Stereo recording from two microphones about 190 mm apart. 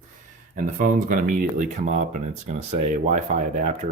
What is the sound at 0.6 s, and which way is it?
Speech, 45° right (ahead or behind).